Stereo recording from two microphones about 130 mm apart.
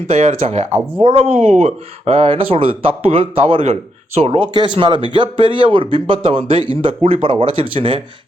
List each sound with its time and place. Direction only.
0.1 s speech: 50° right (ahead or behind)
4.5 s speech: 40° right (ahead or behind)